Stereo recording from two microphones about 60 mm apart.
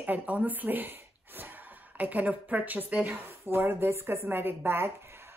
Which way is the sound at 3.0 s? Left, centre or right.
Right.